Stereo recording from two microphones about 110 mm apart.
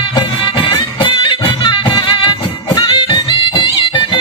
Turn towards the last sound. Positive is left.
turn(degrees=45)  # may be behind; listen again after turning